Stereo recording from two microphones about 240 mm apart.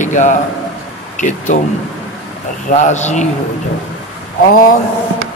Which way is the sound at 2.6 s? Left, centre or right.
Left.